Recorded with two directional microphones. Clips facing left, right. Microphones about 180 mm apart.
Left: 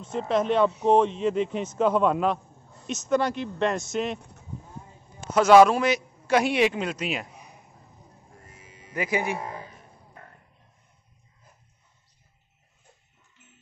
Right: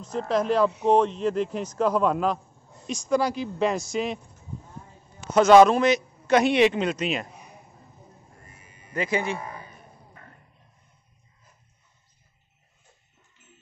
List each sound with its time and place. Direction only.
0.0 s speech: 5° left (ahead or behind)
5.3 s a man's voice: 5° left (ahead or behind)
8.5 s sheep: 90° left
8.9 s a man's voice: 10° left (ahead or behind)